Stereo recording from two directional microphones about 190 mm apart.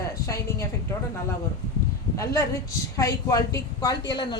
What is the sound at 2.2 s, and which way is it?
A woman's voice, 15° left (ahead or behind).